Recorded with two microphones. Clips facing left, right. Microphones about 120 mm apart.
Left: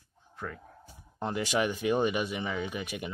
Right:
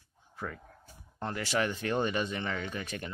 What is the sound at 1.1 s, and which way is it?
Speech, 15° left (ahead or behind).